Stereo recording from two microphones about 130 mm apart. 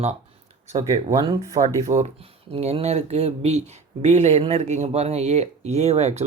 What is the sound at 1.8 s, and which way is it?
Speech, 60° right (ahead or behind).